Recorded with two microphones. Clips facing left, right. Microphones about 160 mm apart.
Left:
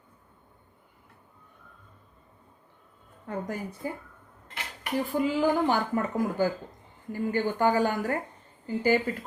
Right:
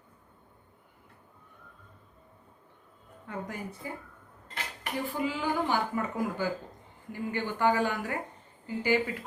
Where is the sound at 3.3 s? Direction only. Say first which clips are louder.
Left 4 dB; 40° left (ahead or behind).